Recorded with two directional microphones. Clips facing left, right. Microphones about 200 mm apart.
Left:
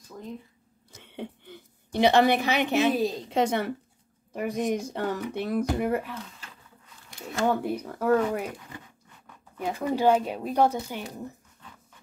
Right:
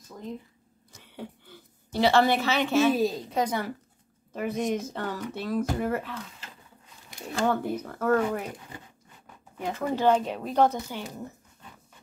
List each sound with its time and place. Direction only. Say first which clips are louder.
1.0 s a sound: left 3 dB; 25° left (ahead or behind)
2.9 s a woman's voice: right 1 dB; centre (ahead or behind)
3.3 s a woman's voice: left 3 dB; 25° left (ahead or behind)
4.3 s a woman's voice: even; 15° left (ahead or behind)
4.6 s a woman's voice: left 1 dB; centre (ahead or behind)
4.8 s speech: left 3 dB; 15° left (ahead or behind)
7.4 s speech: left 1 dB; 15° left (ahead or behind)
9.6 s speech: left 1 dB; 10° left (ahead or behind)